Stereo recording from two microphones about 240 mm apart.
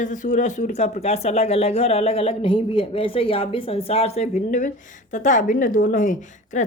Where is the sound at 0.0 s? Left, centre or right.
Left.